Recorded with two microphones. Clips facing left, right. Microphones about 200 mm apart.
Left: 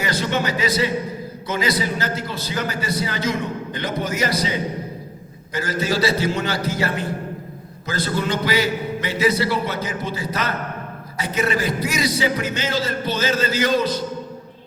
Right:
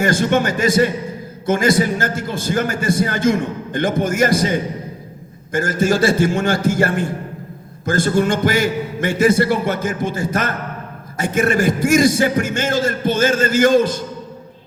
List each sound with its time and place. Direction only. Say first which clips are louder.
0.0 s a man's voice: right 6 dB; 50° right (ahead or behind)